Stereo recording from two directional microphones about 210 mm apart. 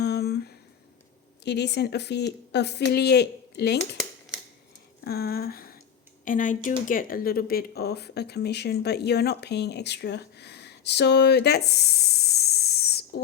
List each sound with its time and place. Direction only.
0.0 s a sound: 50° left (ahead or behind)
1.5 s speech: 55° left (ahead or behind)
4.9 s speech: 50° left (ahead or behind)